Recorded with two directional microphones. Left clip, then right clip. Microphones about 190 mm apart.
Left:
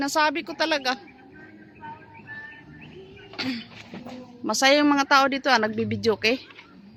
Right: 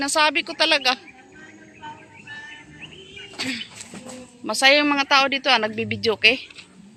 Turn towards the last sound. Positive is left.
turn(degrees=20)  # may be behind; listen again after turning